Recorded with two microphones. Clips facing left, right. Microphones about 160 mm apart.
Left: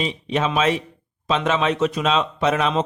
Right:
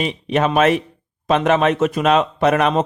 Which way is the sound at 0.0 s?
55° right (ahead or behind).